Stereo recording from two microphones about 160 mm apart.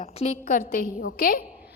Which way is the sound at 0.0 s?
50° left (ahead or behind).